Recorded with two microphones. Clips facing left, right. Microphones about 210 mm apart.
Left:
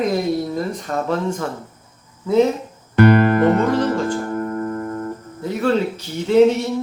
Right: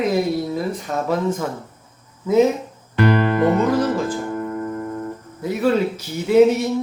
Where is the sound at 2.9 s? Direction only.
50° left (ahead or behind).